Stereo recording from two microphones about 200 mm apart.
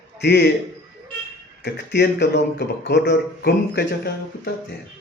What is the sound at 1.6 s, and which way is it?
A man's voice, 60° left (ahead or behind).